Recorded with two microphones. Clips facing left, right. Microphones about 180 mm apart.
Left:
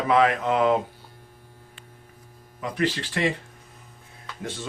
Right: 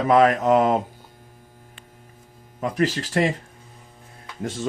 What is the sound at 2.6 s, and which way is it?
Speech, 40° right (ahead or behind).